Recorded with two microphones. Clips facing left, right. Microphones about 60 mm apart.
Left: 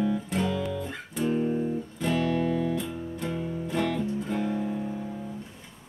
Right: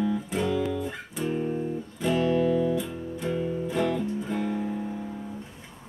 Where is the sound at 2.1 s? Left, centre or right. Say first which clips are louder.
Right 3 dB; right.